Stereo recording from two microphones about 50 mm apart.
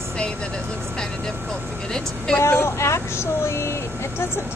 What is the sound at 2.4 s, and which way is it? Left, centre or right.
Vehicle, left.